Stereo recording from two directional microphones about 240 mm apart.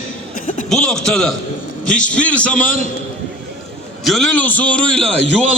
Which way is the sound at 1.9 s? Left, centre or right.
Left.